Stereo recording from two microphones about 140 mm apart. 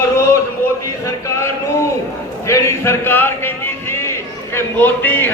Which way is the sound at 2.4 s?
20° left (ahead or behind).